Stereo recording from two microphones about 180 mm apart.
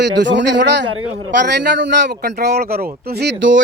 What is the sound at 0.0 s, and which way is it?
A man's voice, 75° right (ahead or behind).